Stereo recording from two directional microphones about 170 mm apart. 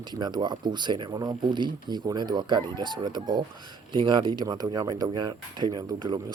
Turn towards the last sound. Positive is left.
turn(degrees=-25)  # may be behind; listen again after turning